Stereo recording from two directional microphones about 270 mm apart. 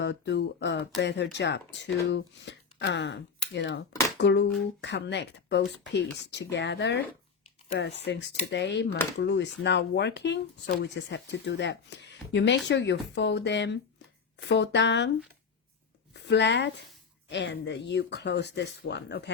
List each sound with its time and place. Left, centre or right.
0.0 s speech: left
8.1 s speech: left
16.2 s speech: left